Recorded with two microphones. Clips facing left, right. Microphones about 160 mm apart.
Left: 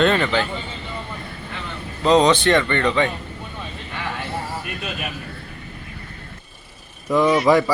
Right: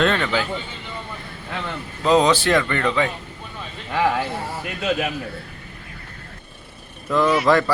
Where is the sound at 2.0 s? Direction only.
5° right (ahead or behind).